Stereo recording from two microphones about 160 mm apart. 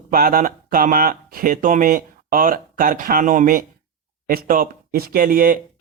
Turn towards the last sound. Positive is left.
turn(degrees=-65)  # may be behind; listen again after turning